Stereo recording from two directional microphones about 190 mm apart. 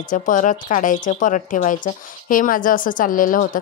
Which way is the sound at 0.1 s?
40° left (ahead or behind).